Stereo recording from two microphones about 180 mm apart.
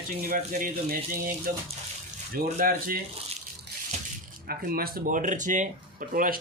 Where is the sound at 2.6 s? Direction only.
50° right (ahead or behind).